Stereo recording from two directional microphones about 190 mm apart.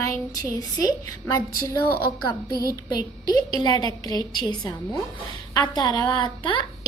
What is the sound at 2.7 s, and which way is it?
A woman's voice, 20° left (ahead or behind).